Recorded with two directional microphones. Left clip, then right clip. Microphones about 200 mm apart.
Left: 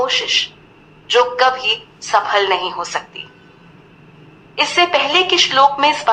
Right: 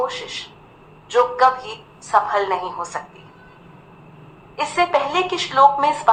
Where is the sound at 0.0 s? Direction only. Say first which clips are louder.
Left 9 dB; 20° left (ahead or behind).